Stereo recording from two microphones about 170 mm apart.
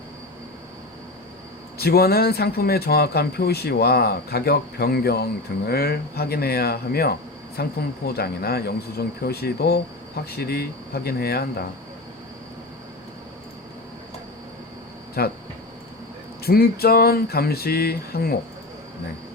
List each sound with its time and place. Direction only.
1.8 s speech: 65° left (ahead or behind)
15.2 s speech: 65° left (ahead or behind)
16.4 s speech: 65° left (ahead or behind)